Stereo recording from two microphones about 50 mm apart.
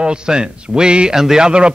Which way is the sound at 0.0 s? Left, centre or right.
Centre.